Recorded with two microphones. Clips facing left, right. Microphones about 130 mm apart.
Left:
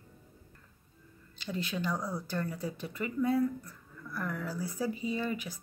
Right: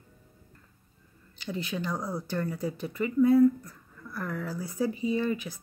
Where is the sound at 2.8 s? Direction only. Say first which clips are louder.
Right 9 dB; 25° right (ahead or behind).